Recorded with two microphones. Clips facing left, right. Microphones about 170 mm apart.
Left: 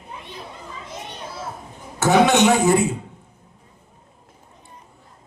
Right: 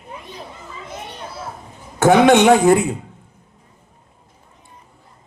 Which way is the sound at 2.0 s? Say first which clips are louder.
Right 4 dB; 55° right (ahead or behind).